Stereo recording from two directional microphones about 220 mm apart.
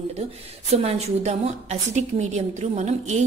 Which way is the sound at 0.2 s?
30° right (ahead or behind).